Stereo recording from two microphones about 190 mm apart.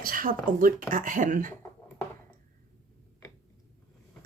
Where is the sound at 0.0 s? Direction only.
45° right (ahead or behind).